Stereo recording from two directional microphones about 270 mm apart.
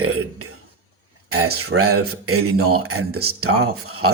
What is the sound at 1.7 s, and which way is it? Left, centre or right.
Speech, right.